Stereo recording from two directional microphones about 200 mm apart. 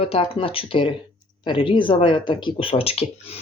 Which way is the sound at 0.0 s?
30° left (ahead or behind).